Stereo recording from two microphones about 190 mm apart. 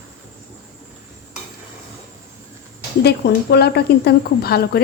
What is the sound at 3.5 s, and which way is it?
Speech, 60° left (ahead or behind).